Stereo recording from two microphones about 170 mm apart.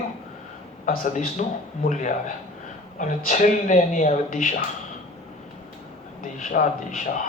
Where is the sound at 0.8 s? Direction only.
55° left (ahead or behind).